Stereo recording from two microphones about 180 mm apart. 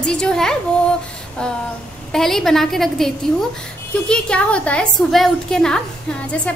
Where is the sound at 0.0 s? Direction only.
5° left (ahead or behind).